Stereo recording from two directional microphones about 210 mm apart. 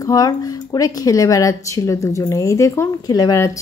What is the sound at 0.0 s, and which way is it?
Speech, 20° left (ahead or behind).